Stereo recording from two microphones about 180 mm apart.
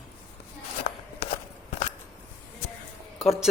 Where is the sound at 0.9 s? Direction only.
45° left (ahead or behind).